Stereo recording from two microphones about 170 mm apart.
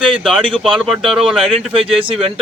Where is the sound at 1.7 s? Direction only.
35° right (ahead or behind).